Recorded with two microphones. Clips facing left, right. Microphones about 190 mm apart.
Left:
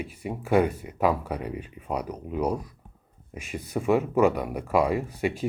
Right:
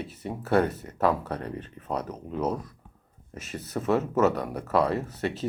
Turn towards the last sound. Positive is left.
turn(degrees=10)  # may be behind; listen again after turning